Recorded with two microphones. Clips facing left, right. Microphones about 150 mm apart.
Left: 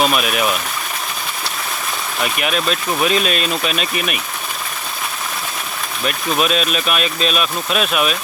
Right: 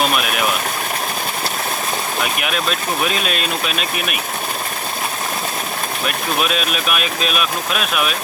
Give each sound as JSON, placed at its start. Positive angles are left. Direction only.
{"t": 3.1, "sound": "speech", "side_deg": 0}
{"t": 6.4, "sound": "speech", "side_deg": -5}